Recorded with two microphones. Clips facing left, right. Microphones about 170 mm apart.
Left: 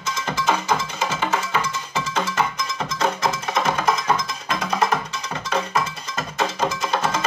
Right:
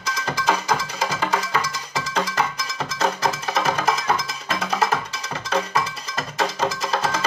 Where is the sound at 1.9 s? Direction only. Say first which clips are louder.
Right 1 dB; 35° right (ahead or behind).